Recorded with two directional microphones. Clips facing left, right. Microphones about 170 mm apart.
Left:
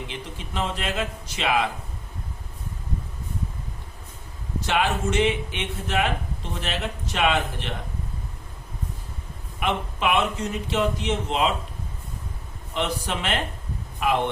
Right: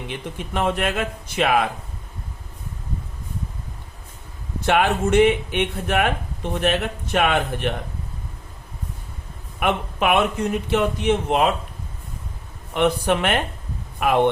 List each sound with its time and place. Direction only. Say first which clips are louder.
0.1 s speech: right 5 dB; 55° right (ahead or behind)
4.6 s speech: right 5 dB; 55° right (ahead or behind)
9.6 s speech: right 4 dB; 55° right (ahead or behind)
12.7 s speech: right 8 dB; 55° right (ahead or behind)